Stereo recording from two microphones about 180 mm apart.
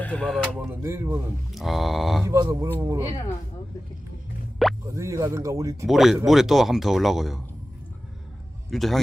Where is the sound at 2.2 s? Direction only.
20° right (ahead or behind).